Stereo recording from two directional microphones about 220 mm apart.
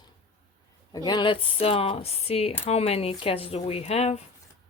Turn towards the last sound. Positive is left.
turn(degrees=30)  # may be behind; listen again after turning